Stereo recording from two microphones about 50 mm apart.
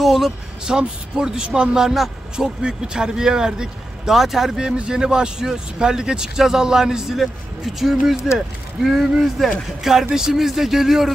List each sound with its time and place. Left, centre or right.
0.0 s speech: centre
0.7 s a man's voice: centre
4.6 s a man's voice: centre